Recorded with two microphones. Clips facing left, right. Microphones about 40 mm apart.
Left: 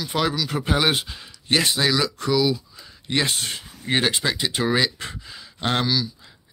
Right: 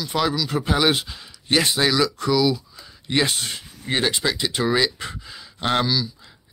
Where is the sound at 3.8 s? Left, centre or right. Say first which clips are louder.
Even; centre.